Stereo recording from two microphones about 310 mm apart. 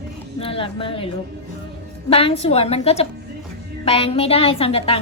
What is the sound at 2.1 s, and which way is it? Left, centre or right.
A woman's voice, centre.